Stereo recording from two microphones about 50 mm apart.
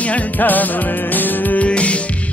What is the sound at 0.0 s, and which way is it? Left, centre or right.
Music, left.